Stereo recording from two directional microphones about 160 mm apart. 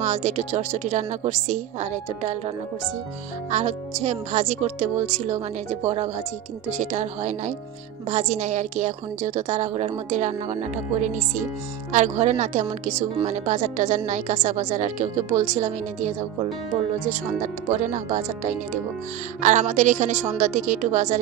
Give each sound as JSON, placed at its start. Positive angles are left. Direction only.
{"t": 0.0, "sound": "a woman's voice", "side_deg": -45}